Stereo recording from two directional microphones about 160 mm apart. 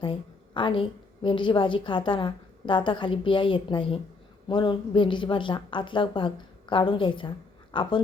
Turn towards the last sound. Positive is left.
turn(degrees=30)  # may be behind; listen again after turning